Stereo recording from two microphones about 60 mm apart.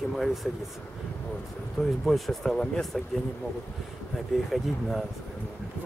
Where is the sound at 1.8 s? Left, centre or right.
Centre.